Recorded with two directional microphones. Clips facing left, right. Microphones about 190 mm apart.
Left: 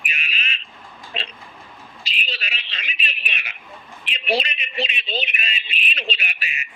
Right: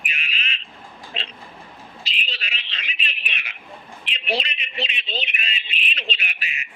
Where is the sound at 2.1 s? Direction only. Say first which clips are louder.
Left 3 dB; 10° left (ahead or behind).